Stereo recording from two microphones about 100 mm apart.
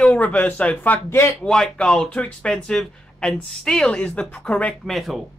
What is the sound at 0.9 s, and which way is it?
Speech, 25° left (ahead or behind).